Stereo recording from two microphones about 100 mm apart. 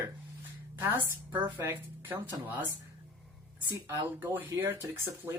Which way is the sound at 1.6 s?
20° right (ahead or behind).